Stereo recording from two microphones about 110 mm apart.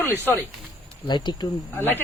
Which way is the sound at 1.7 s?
20° left (ahead or behind).